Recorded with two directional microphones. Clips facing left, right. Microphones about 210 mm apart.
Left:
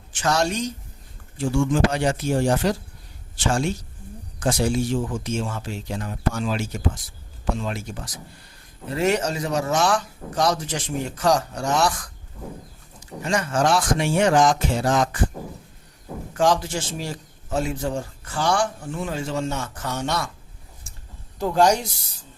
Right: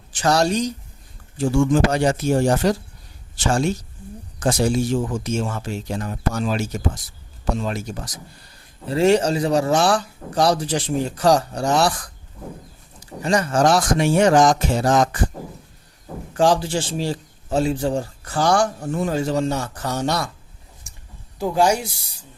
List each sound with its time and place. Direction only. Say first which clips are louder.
0.1 s a woman's voice: right 4 dB; 35° right (ahead or behind)
8.9 s a man's voice: right 6 dB; 30° right (ahead or behind)
16.4 s a man's voice: right 3 dB; 30° right (ahead or behind)
21.3 s speech: even; 10° right (ahead or behind)